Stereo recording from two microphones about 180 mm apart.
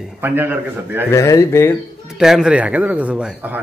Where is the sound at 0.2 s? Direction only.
10° right (ahead or behind).